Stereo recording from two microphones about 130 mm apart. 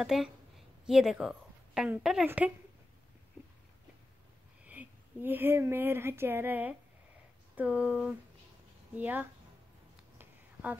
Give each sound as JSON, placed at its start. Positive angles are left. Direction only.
{"t": 0.0, "sound": "a woman's voice", "side_deg": -5}
{"t": 4.6, "sound": "speech", "side_deg": -15}
{"t": 10.1, "sound": "a sound", "side_deg": -15}